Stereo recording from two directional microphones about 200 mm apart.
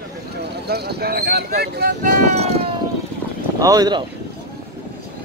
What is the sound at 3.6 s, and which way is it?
Speech, 20° right (ahead or behind).